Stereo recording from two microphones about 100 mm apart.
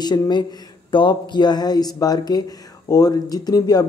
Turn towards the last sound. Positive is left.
turn(degrees=40)  # may be behind; listen again after turning